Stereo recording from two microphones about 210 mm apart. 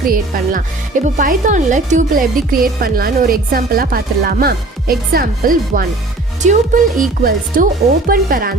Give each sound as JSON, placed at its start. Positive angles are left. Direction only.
{"t": 0.0, "sound": "speech", "side_deg": -45}